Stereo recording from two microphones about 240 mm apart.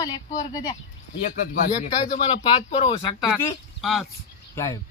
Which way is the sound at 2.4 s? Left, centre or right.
Left.